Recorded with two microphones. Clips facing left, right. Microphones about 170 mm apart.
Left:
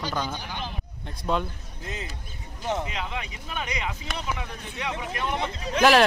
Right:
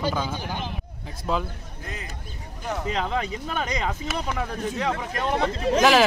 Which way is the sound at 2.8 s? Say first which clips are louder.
Right 7 dB; 40° right (ahead or behind).